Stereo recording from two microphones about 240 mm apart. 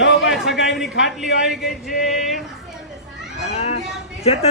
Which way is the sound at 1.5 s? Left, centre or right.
Centre.